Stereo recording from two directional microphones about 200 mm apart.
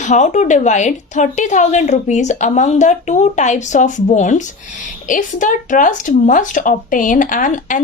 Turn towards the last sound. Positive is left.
turn(degrees=40)  # may be behind; listen again after turning